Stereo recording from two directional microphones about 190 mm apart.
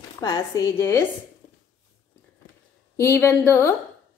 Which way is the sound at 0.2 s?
20° left (ahead or behind).